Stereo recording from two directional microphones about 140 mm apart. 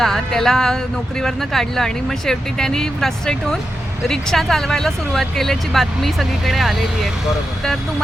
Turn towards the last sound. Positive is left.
turn(degrees=0)  # may be behind; listen again after turning